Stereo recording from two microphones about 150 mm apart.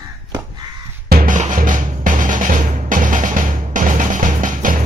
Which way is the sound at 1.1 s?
80° right.